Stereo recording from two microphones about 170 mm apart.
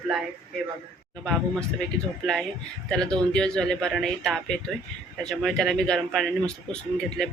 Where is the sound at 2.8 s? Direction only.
5° left (ahead or behind).